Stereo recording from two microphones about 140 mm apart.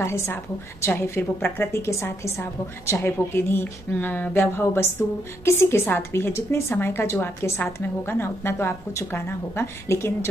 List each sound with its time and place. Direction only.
0.0 s a woman's voice: 20° left (ahead or behind)